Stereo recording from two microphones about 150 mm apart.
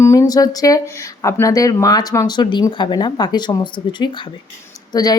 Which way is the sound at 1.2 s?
20° left (ahead or behind).